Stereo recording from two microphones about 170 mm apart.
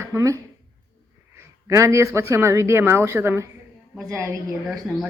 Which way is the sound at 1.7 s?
15° right (ahead or behind).